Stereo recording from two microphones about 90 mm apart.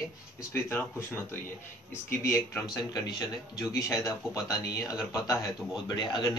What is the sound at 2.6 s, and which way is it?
A man's voice, 40° left (ahead or behind).